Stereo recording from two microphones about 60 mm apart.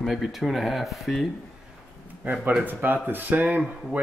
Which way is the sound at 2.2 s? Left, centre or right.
Right.